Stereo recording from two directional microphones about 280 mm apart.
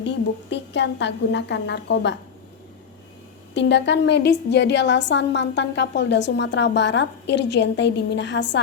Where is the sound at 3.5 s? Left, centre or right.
Left.